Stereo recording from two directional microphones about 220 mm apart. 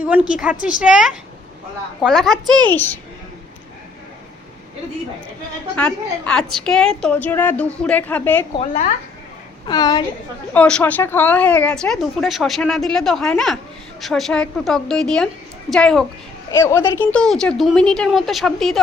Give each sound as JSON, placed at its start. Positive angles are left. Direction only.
{"t": 0.0, "sound": "a woman's voice", "side_deg": -5}
{"t": 5.7, "sound": "a woman's voice", "side_deg": 5}
{"t": 8.5, "sound": "speech", "side_deg": 30}
{"t": 9.6, "sound": "a woman's voice", "side_deg": 20}
{"t": 10.5, "sound": "a woman's voice", "side_deg": 5}
{"t": 16.5, "sound": "a woman's voice", "side_deg": 10}